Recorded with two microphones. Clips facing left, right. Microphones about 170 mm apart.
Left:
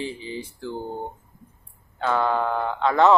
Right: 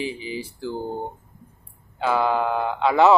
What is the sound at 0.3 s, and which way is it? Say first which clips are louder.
Speech: right 2 dB; 10° right (ahead or behind).